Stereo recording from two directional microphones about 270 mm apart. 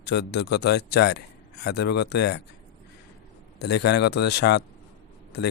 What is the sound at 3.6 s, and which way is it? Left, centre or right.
Speech, left.